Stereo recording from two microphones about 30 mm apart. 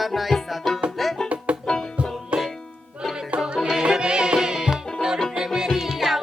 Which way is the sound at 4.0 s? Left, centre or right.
Right.